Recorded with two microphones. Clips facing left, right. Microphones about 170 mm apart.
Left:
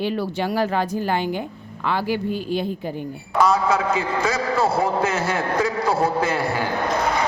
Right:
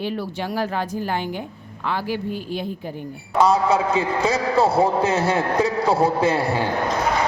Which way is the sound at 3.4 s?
30° right (ahead or behind).